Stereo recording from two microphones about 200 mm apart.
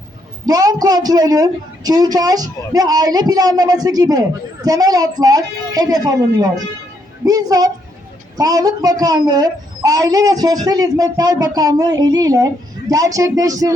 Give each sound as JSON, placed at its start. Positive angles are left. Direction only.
{"t": 0.4, "sound": "a woman's voice", "side_deg": -20}